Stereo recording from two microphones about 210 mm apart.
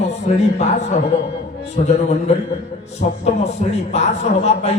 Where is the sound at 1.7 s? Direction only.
30° left (ahead or behind).